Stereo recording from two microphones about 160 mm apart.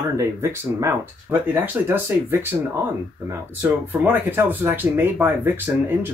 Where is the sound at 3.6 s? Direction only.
10° right (ahead or behind).